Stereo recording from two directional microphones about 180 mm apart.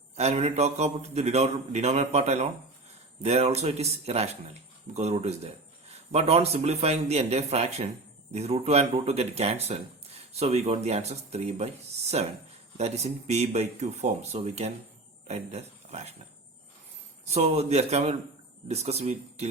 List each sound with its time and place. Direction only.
0.2 s a man's voice: 35° right (ahead or behind)
12.7 s a man's voice: 35° right (ahead or behind)
17.2 s a man's voice: 35° right (ahead or behind)